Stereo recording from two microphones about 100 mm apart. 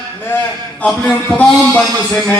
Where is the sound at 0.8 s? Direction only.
10° left (ahead or behind).